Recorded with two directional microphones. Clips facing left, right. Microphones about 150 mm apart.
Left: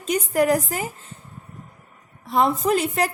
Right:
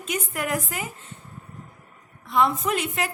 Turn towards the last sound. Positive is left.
turn(degrees=35)  # may be behind; listen again after turning